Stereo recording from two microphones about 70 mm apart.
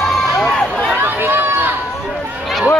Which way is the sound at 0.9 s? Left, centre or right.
Right.